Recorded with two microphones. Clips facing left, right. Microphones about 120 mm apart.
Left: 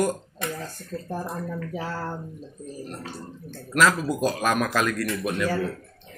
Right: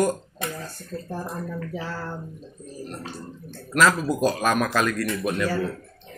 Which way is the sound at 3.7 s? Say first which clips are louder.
Right 1 dB; 5° left (ahead or behind).